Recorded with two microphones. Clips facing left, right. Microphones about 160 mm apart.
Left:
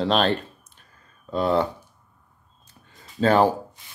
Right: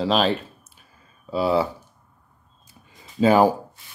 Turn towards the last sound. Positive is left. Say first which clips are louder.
# right 2 dB
turn(degrees=-10)  # may be behind; listen again after turning